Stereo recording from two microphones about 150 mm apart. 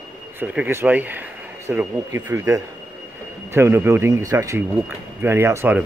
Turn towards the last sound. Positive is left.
turn(degrees=-15)  # may be behind; listen again after turning